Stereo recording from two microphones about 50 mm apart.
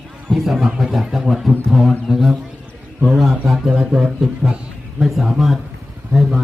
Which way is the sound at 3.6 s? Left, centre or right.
Centre.